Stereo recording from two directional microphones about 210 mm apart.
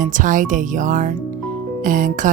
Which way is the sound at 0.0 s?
40° right (ahead or behind).